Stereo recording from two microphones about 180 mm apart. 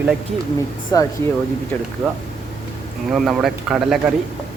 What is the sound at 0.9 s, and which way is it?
Speech, 20° left (ahead or behind).